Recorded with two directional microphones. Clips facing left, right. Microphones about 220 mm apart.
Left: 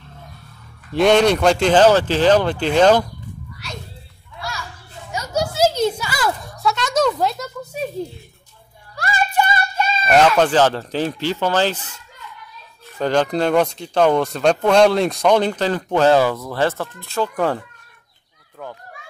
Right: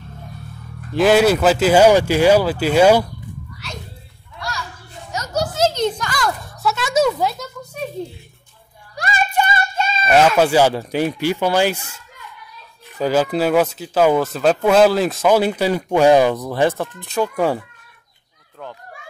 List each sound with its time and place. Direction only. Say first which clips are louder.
0.9 s speech: right 1 dB; 5° right (ahead or behind)
5.1 s a sound: even; 10° left (ahead or behind)
8.9 s music: even; 20° right (ahead or behind)
10.0 s speech: right 1 dB; 5° right (ahead or behind)